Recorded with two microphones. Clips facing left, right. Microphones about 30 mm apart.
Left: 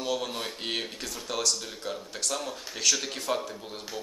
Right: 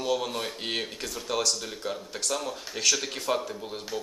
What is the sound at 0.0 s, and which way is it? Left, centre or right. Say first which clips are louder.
Speech: right 2 dB; centre.